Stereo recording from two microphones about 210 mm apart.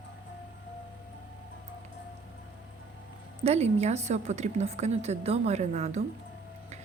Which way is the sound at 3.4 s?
30° right (ahead or behind).